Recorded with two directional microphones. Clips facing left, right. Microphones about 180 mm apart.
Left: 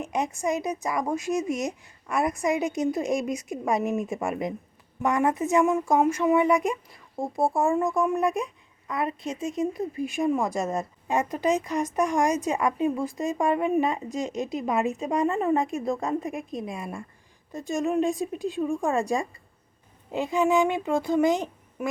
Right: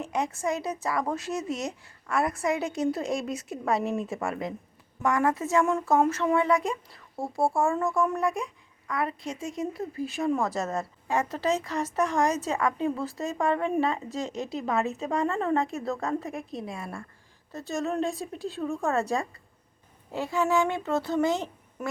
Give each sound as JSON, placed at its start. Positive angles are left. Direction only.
{"t": 0.0, "sound": "a woman's voice", "side_deg": 20}